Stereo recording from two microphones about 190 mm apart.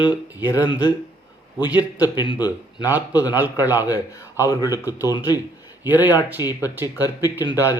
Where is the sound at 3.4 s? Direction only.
10° right (ahead or behind).